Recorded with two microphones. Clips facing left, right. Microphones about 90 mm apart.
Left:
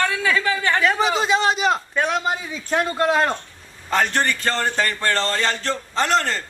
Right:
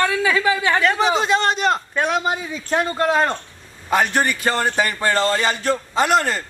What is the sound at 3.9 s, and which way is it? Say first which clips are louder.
A man's voice: right 2 dB; 10° right (ahead or behind).